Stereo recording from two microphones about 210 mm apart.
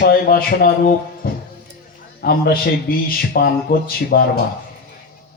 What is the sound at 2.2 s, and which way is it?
A man's voice, 45° left (ahead or behind).